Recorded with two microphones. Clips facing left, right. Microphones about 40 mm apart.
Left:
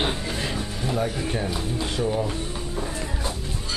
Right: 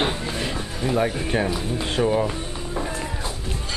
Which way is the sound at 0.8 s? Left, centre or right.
Right.